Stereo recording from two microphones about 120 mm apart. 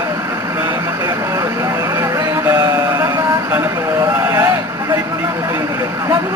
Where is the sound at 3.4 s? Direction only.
20° right (ahead or behind).